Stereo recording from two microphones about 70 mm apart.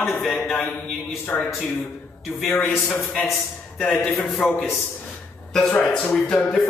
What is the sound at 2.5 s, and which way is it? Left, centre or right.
Speech, left.